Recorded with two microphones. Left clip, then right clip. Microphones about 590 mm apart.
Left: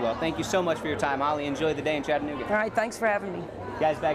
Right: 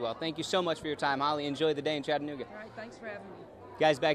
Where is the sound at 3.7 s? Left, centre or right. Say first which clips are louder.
Left 1 dB; right.